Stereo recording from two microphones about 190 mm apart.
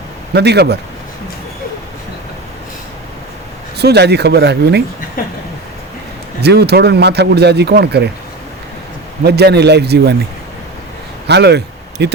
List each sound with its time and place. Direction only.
0.3 s speech: 60° right (ahead or behind)
3.8 s speech: 60° right (ahead or behind)
6.4 s speech: 60° right (ahead or behind)
9.2 s speech: 60° right (ahead or behind)
11.3 s speech: 60° right (ahead or behind)